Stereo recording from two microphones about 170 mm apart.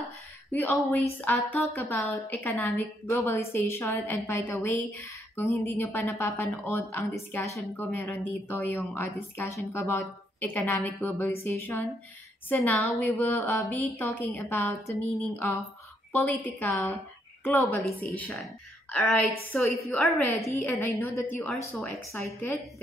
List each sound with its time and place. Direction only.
0.5 s a woman's voice: 10° left (ahead or behind)
2.8 s a woman's voice: 15° left (ahead or behind); by 20.8 s centre (ahead or behind)
21.0 s a woman's voice: 15° left (ahead or behind)